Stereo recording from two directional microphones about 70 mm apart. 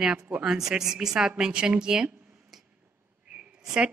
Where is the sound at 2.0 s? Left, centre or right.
Centre.